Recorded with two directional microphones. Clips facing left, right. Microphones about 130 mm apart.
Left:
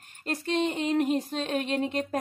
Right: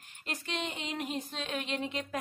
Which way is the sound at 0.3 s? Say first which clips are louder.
Left 10 dB; 45° left (ahead or behind).